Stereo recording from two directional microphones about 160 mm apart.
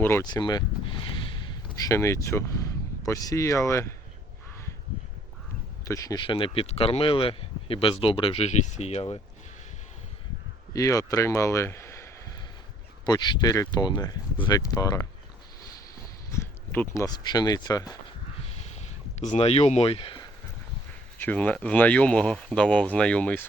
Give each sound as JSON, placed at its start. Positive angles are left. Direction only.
{"t": 0.0, "sound": "speech", "side_deg": 15}
{"t": 0.3, "sound": "a sound", "side_deg": 25}
{"t": 1.9, "sound": "speech", "side_deg": 20}
{"t": 5.8, "sound": "speech", "side_deg": 20}
{"t": 6.2, "sound": "speech", "side_deg": 35}
{"t": 10.8, "sound": "speech", "side_deg": 20}
{"t": 16.3, "sound": "speech", "side_deg": 15}
{"t": 19.2, "sound": "speech", "side_deg": 45}
{"t": 21.2, "sound": "speech", "side_deg": 10}